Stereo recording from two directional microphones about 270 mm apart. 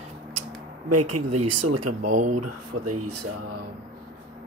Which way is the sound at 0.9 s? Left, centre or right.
Right.